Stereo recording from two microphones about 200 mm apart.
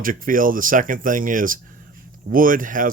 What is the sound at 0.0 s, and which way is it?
Speech, 45° right (ahead or behind).